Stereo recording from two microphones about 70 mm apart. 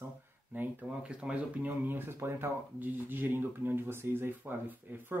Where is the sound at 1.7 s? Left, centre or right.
Right.